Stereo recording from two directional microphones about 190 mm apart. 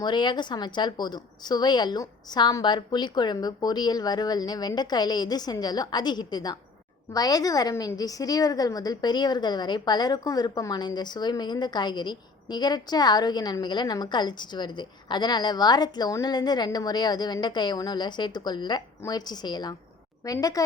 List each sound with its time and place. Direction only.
0.0 s a woman's voice: 25° left (ahead or behind)